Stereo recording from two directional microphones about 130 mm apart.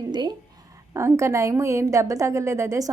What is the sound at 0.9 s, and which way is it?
A woman's voice, 20° right (ahead or behind).